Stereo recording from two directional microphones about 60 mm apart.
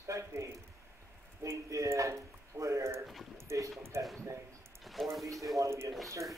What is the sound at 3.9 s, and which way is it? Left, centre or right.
Speech, right.